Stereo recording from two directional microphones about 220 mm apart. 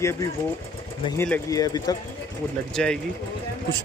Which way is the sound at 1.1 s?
10° left (ahead or behind).